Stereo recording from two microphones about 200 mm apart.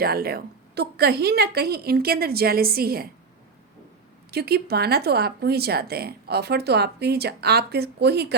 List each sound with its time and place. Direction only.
0.0 s speech: 50° right (ahead or behind)
4.3 s speech: 50° right (ahead or behind)